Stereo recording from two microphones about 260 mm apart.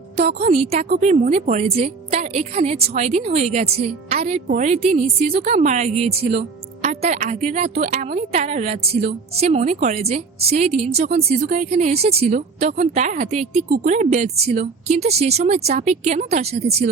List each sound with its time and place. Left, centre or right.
0.2 s a woman's voice: right